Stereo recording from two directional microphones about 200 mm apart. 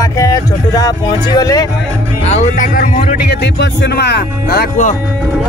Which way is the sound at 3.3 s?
55° left (ahead or behind).